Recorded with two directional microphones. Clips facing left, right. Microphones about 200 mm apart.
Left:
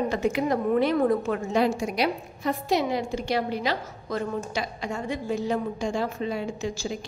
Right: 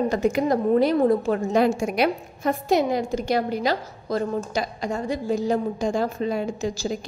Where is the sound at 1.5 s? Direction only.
50° right (ahead or behind).